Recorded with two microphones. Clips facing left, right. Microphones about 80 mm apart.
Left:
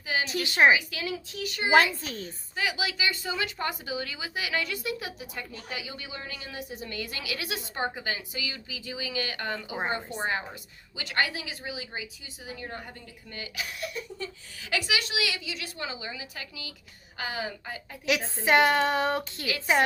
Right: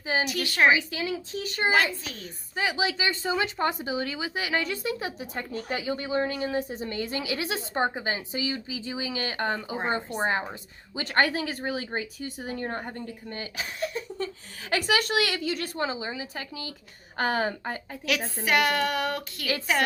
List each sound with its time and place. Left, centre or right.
0.3 s speech: left
0.7 s a woman's voice: right
2.0 s a woman's voice: left
2.6 s speech: right
10.9 s speech: right
17.2 s speech: right
18.4 s speech: left